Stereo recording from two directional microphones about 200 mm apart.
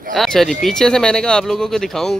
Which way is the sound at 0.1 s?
Centre (ahead or behind).